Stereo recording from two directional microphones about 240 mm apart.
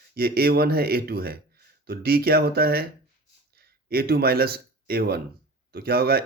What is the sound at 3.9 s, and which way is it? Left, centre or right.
Speech, right.